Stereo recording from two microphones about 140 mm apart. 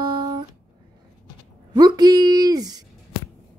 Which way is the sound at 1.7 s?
30° right (ahead or behind).